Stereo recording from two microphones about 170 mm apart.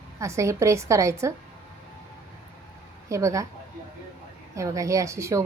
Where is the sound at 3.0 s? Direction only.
20° right (ahead or behind).